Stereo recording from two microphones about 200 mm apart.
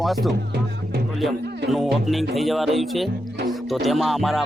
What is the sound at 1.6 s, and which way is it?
Speech, centre (ahead or behind).